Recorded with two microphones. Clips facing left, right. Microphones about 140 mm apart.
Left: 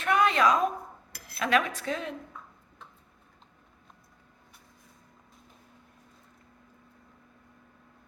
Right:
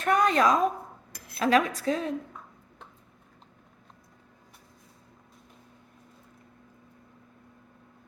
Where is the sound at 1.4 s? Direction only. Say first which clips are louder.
Right 3 dB; 35° right (ahead or behind).